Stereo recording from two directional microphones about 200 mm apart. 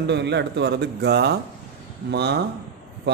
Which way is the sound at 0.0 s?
60° right (ahead or behind).